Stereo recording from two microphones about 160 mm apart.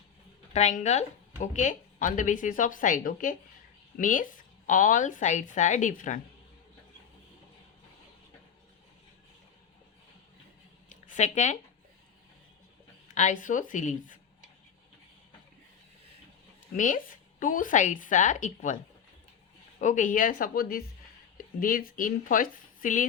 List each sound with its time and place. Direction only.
0.5 s a woman's voice: 45° left (ahead or behind)
10.8 s a sound: 50° left (ahead or behind)
13.1 s a woman's voice: 50° left (ahead or behind)
16.7 s a woman's voice: 55° left (ahead or behind)
19.8 s a woman's voice: 55° left (ahead or behind)